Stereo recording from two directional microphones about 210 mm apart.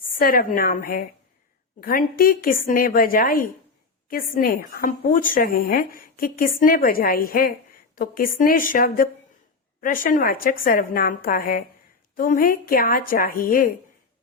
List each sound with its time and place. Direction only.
0.1 s speech: 45° left (ahead or behind)